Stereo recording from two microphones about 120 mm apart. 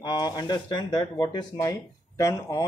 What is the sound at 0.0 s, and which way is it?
Speech, 35° left (ahead or behind).